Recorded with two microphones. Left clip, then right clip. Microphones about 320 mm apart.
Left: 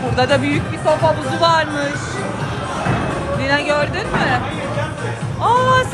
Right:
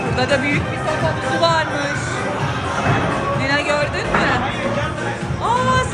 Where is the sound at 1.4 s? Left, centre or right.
Centre.